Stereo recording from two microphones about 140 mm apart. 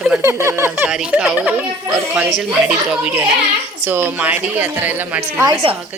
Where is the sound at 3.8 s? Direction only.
15° right (ahead or behind).